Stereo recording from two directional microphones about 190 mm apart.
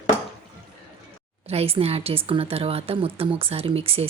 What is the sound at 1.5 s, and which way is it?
A woman's voice, 30° right (ahead or behind).